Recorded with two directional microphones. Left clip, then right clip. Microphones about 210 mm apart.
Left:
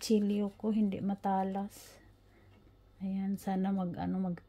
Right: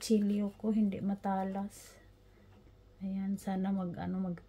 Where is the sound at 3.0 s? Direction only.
35° left (ahead or behind).